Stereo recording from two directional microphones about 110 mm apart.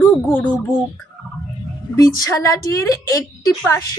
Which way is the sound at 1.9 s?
30° left (ahead or behind).